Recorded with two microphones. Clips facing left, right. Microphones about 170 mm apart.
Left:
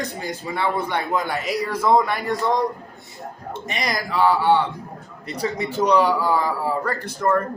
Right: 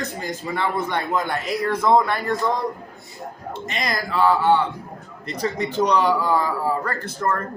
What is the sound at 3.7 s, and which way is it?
A man's voice, 15° left (ahead or behind).